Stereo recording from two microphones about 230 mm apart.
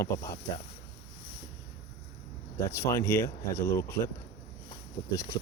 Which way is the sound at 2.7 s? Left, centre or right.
Centre.